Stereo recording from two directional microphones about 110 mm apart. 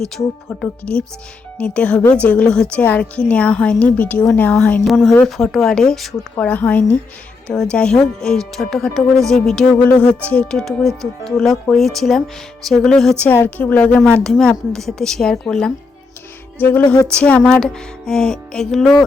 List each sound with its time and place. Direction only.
0.6 s speech: 10° left (ahead or behind)
4.9 s speech: centre (ahead or behind)
6.3 s speech: 15° left (ahead or behind)
13.2 s speech: 20° left (ahead or behind)
16.6 s speech: 15° left (ahead or behind)